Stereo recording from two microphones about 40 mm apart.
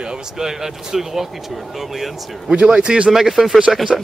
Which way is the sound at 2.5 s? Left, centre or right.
Right.